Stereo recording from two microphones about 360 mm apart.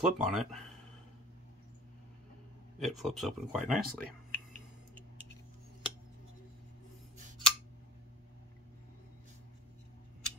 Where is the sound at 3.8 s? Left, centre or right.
Right.